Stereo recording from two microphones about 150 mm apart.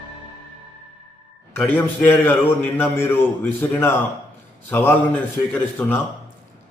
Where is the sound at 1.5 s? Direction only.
10° left (ahead or behind).